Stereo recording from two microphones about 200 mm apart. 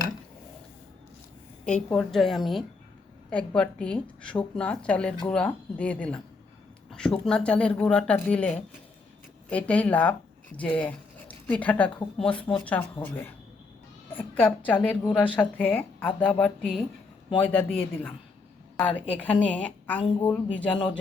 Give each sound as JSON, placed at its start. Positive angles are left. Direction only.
{"t": 1.6, "sound": "a woman's voice", "side_deg": 5}
{"t": 19.1, "sound": "a woman's voice", "side_deg": 5}
{"t": 20.0, "sound": "speech", "side_deg": 20}
{"t": 20.2, "sound": "a woman's voice", "side_deg": 5}